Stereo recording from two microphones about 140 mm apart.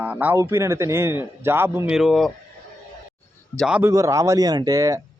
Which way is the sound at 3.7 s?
10° right (ahead or behind).